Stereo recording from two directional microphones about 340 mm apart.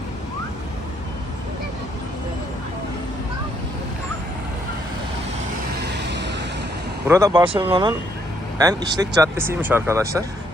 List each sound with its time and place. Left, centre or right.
6.0 s vehicle: right
7.1 s speech: centre